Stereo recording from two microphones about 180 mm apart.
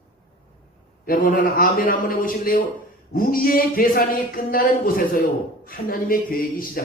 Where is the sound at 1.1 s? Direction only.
55° left (ahead or behind).